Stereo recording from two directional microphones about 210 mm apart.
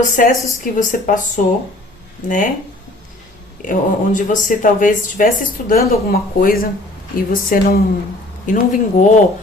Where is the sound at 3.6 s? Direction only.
40° left (ahead or behind).